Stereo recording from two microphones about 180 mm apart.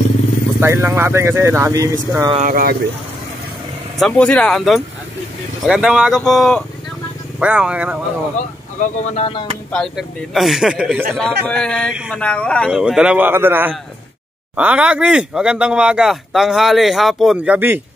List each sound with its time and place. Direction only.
0.6 s speech: 15° right (ahead or behind)
2.4 s speech: 55° right (ahead or behind)
4.0 s speech: 5° left (ahead or behind)
8.4 s speech: 40° left (ahead or behind)
9.7 s speech: centre (ahead or behind)
11.1 s speech: 5° left (ahead or behind); by 17.8 s 10° right (ahead or behind)